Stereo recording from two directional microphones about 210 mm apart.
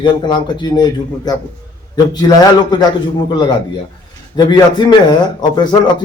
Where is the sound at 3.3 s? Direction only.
20° left (ahead or behind).